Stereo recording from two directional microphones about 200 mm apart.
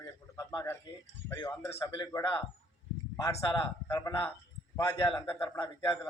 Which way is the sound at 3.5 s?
20° left (ahead or behind).